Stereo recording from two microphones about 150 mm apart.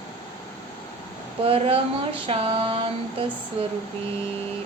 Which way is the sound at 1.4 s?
40° right (ahead or behind).